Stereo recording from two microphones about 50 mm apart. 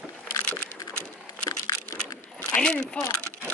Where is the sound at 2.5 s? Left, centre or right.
Centre.